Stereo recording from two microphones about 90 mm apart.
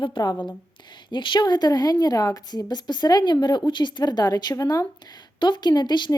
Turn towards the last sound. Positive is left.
turn(degrees=55)  # may be behind; listen again after turning